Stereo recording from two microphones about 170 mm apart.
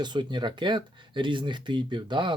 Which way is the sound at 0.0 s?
25° right (ahead or behind).